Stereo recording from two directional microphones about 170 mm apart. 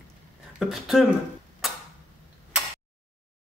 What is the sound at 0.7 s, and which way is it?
Speech, centre (ahead or behind).